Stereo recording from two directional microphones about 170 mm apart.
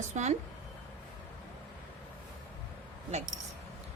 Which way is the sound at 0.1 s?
45° right (ahead or behind).